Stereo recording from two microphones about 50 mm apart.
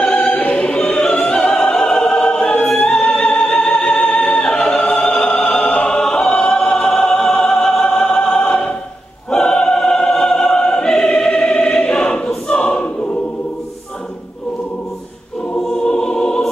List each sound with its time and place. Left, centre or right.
0.0 s choir: centre
0.3 s opera: left
9.3 s choir: centre
15.6 s music: centre